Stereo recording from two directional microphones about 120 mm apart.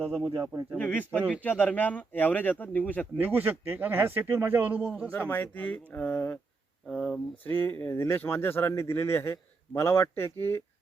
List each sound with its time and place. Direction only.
0.0 s speech: 15° right (ahead or behind)
0.3 s speech: 30° right (ahead or behind)
0.8 s speech: 10° left (ahead or behind)
3.2 s speech: 15° right (ahead or behind)
5.1 s speech: 15° left (ahead or behind)